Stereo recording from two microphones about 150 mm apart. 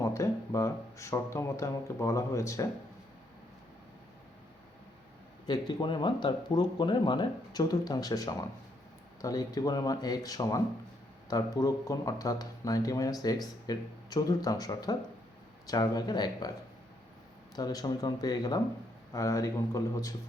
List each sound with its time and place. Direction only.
0.0 s speech: 20° left (ahead or behind)
5.5 s speech: 30° left (ahead or behind)
17.5 s speech: 25° left (ahead or behind)